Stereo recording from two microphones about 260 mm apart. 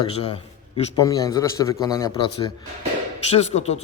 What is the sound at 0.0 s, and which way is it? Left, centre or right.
A man's voice, left.